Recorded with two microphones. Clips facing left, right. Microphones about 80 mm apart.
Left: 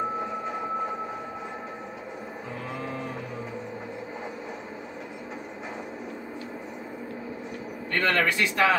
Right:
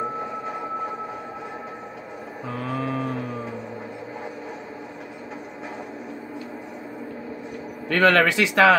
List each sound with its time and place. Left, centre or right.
2.7 s music: right
7.9 s speech: right